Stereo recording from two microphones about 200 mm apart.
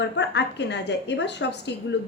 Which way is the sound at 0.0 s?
60° left (ahead or behind).